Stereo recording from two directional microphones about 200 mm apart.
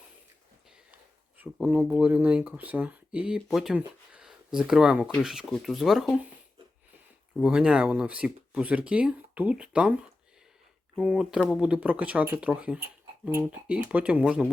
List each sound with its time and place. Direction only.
1.4 s speech: 10° right (ahead or behind)
7.3 s speech: 5° right (ahead or behind)
11.0 s speech: 5° right (ahead or behind)